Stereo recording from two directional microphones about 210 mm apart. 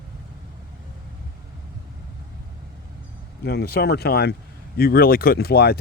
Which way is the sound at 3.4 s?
50° left (ahead or behind).